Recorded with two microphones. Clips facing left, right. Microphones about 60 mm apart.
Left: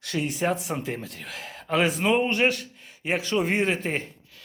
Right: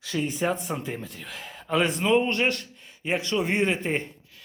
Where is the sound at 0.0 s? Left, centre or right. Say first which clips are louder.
Even; centre.